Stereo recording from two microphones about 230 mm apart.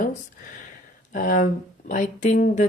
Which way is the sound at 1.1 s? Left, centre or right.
Left.